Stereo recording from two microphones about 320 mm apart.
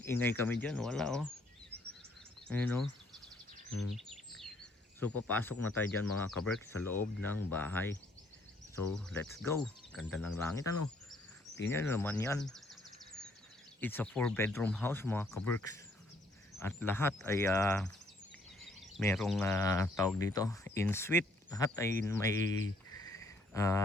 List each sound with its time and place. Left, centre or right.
0.0 s speech: centre
2.5 s speech: centre
3.7 s a sound: left
3.9 s bird vocalization: centre
5.3 s speech: centre
13.8 s speech: centre
22.9 s a sound: centre